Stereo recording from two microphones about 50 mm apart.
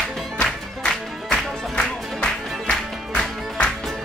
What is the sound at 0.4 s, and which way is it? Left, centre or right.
Music, centre.